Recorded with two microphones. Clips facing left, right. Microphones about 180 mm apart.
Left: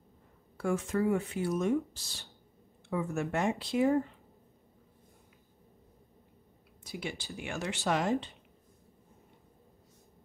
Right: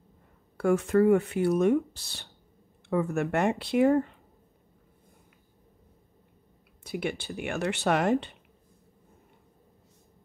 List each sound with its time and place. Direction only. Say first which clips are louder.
0.6 s speech: right 8 dB; 65° right (ahead or behind)
6.8 s speech: right 7 dB; 60° right (ahead or behind)